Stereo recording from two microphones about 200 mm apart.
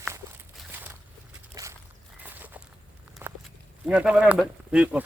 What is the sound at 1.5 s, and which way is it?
Walk, 15° right (ahead or behind).